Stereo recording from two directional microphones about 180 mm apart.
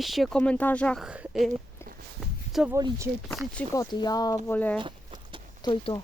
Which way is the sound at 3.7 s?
20° left (ahead or behind).